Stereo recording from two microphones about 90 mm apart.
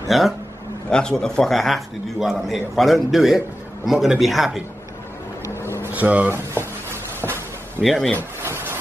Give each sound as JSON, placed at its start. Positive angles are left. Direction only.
{"t": 0.1, "sound": "a man's voice", "side_deg": 0}
{"t": 5.7, "sound": "vehicle", "side_deg": -25}
{"t": 7.8, "sound": "a man's voice", "side_deg": 0}
{"t": 8.2, "sound": "a sound", "side_deg": -25}